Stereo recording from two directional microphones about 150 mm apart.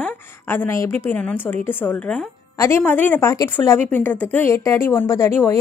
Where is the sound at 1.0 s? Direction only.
10° left (ahead or behind).